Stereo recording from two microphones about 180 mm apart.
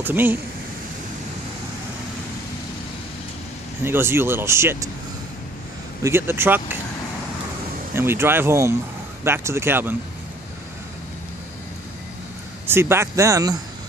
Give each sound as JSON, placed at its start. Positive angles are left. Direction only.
{"t": 0.0, "sound": "speech", "side_deg": -10}
{"t": 3.8, "sound": "speech", "side_deg": -15}
{"t": 6.0, "sound": "speech", "side_deg": -15}
{"t": 7.9, "sound": "speech", "side_deg": -15}
{"t": 12.6, "sound": "speech", "side_deg": -15}